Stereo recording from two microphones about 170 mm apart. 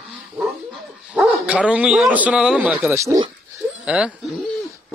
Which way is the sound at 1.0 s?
5° right (ahead or behind).